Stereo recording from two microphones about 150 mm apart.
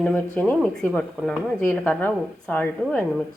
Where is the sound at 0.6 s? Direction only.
5° left (ahead or behind).